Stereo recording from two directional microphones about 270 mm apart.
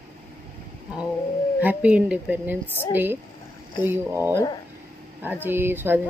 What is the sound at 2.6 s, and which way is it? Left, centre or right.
Speech, centre.